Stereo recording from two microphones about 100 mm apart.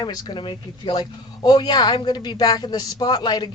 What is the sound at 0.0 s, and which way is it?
Speech, 40° left (ahead or behind).